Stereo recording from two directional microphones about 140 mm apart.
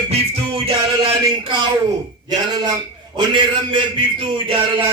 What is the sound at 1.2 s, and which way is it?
Speech, 30° right (ahead or behind).